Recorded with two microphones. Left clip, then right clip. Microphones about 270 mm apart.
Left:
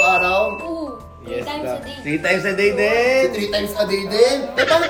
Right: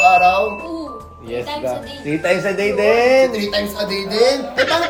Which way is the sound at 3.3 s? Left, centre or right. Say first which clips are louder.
Even; centre.